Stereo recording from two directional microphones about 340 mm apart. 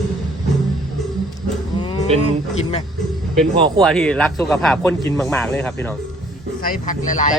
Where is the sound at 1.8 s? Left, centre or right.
Centre.